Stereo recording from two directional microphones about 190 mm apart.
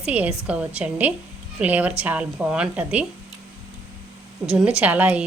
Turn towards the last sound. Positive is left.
turn(degrees=-5)  # may be behind; listen again after turning